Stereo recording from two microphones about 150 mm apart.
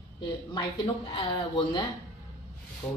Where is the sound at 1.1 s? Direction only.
35° left (ahead or behind).